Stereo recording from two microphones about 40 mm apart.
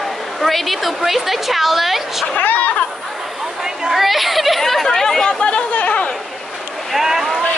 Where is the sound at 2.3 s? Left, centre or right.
Left.